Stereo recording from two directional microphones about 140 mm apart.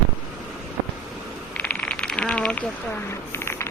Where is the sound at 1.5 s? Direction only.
10° left (ahead or behind).